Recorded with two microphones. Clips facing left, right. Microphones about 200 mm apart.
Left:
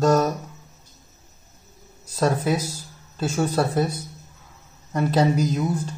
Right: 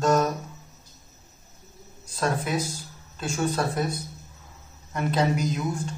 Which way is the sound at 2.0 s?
35° left (ahead or behind).